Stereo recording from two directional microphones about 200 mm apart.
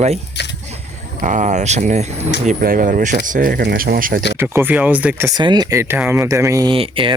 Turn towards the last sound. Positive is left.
turn(degrees=-25)  # may be behind; listen again after turning